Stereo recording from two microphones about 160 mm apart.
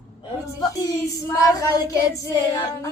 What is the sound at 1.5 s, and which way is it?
Female singing, 25° left (ahead or behind).